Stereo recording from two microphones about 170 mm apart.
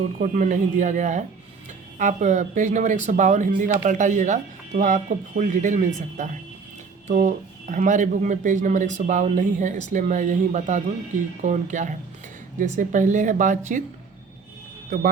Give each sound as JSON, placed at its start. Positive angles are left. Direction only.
{"t": 0.2, "sound": "speech", "side_deg": -50}